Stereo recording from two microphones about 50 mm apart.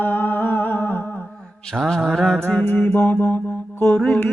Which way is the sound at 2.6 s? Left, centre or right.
Left.